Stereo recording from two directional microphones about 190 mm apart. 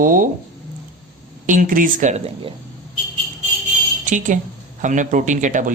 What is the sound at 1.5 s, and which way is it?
Speech, 45° right (ahead or behind).